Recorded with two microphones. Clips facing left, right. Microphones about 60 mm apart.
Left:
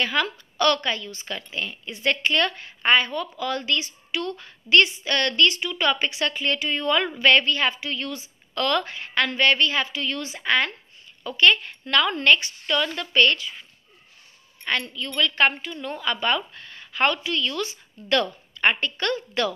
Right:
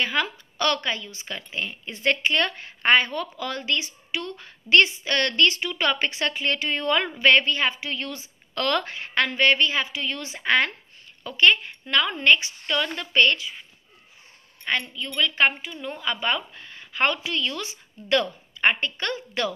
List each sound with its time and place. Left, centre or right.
0.0 s a woman's voice: right
14.6 s a woman's voice: centre